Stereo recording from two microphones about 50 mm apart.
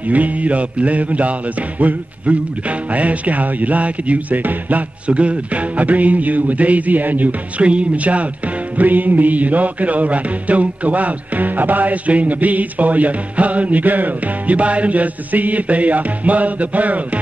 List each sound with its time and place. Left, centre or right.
0.1 s speech: right
8.7 s music: right